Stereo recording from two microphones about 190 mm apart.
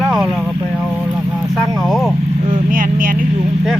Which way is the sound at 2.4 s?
40° right (ahead or behind).